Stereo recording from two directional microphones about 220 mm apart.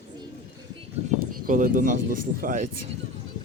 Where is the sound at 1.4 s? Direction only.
40° right (ahead or behind).